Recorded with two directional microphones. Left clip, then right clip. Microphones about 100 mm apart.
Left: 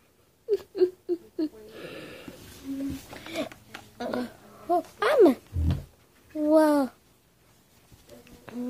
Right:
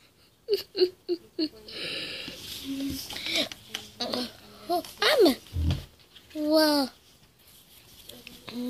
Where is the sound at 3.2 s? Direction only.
5° right (ahead or behind).